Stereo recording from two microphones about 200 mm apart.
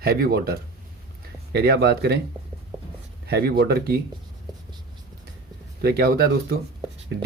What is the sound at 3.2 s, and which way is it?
Speech, 50° right (ahead or behind).